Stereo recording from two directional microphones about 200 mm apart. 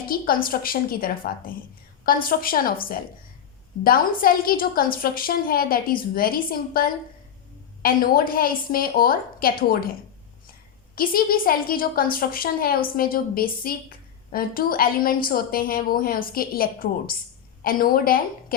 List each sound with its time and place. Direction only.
0.1 s a woman's voice: 45° left (ahead or behind)
10.9 s a woman's voice: 45° left (ahead or behind)